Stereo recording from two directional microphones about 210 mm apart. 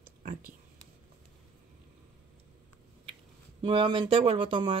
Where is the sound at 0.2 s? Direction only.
40° right (ahead or behind).